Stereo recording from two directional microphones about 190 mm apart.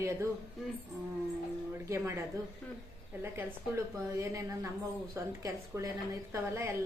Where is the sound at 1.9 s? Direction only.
15° right (ahead or behind).